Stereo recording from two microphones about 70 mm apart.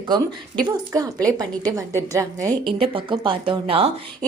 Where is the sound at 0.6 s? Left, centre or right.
Right.